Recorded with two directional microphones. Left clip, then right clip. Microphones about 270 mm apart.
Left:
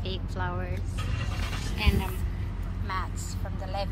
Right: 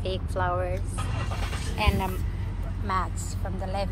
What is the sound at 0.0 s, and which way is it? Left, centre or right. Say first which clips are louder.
Vehicle: right 6 dB; centre.